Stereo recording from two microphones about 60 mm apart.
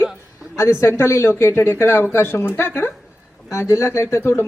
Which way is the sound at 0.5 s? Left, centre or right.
Left.